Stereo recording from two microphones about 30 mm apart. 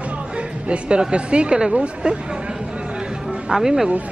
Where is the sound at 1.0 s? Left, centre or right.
Right.